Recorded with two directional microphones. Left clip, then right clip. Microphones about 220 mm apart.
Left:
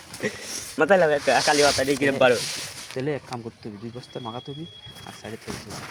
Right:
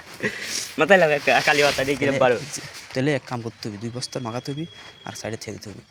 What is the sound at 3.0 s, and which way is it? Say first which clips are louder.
Speech: right 5 dB; 60° right (ahead or behind).